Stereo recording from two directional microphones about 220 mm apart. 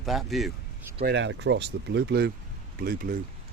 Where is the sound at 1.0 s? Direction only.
55° right (ahead or behind).